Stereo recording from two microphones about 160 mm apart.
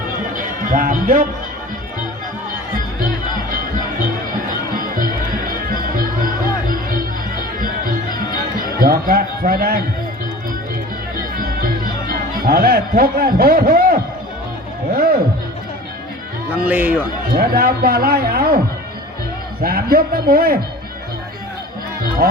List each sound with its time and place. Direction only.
0.3 s speech: 60° right (ahead or behind)
4.8 s music: 60° right (ahead or behind)
12.0 s a man's voice: 65° right (ahead or behind)
14.9 s music: 70° right (ahead or behind)
16.5 s speech: 10° right (ahead or behind)
17.3 s a man's voice: 70° right (ahead or behind)
19.6 s a man's voice: 70° right (ahead or behind)